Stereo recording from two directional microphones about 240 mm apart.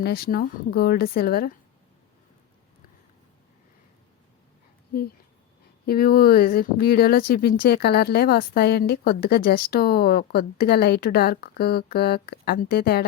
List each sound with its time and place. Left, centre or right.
0.0 s speech: left
5.8 s speech: left